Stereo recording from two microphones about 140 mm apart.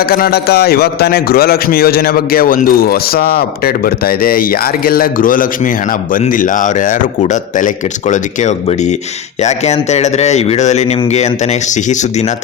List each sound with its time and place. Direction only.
0.1 s a man's voice: 90° left; by 11.3 s 55° left (ahead or behind)